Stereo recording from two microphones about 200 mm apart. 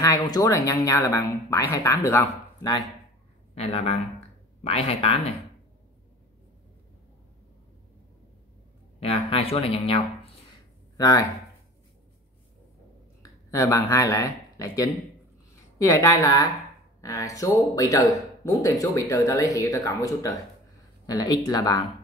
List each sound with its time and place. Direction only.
0.0 s speech: 15° left (ahead or behind)
3.5 s speech: 30° left (ahead or behind)
9.0 s speech: 30° left (ahead or behind)
11.0 s speech: 15° left (ahead or behind)
13.2 s speech: 15° left (ahead or behind)